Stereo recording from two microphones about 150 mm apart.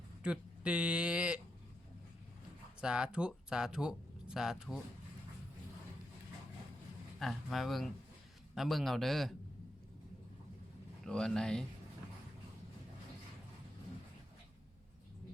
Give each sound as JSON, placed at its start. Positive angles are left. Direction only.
{"t": 0.2, "sound": "speech", "side_deg": -5}
{"t": 2.8, "sound": "speech", "side_deg": -5}
{"t": 7.2, "sound": "speech", "side_deg": 0}
{"t": 11.0, "sound": "speech", "side_deg": 5}